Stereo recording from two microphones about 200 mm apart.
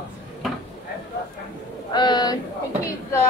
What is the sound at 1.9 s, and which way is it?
Speech, 20° left (ahead or behind).